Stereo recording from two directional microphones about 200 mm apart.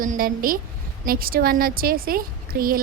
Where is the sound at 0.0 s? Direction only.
45° right (ahead or behind).